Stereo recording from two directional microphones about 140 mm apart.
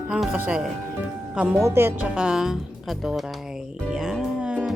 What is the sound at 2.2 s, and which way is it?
Music, 5° right (ahead or behind).